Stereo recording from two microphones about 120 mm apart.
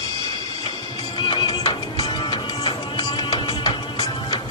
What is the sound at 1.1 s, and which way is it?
Music, 40° left (ahead or behind).